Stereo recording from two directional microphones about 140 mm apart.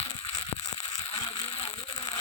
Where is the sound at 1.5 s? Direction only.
45° left (ahead or behind).